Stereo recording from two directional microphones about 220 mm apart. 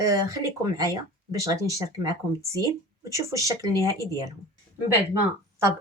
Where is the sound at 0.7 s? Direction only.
15° right (ahead or behind).